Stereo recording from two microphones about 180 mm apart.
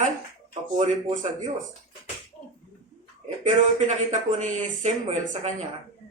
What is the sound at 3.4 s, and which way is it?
Speech, 40° right (ahead or behind).